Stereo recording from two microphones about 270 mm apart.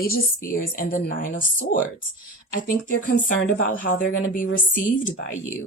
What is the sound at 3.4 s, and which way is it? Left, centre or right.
Speech, left.